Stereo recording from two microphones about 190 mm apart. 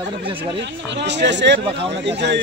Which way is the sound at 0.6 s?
65° right (ahead or behind).